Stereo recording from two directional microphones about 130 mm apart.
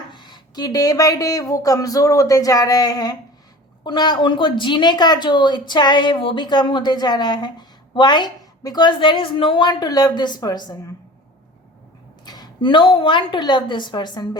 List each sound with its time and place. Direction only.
0.1 s speech: 35° left (ahead or behind)
12.2 s a woman's voice: 30° left (ahead or behind)